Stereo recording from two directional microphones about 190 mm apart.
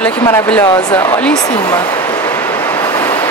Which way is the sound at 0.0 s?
10° left (ahead or behind).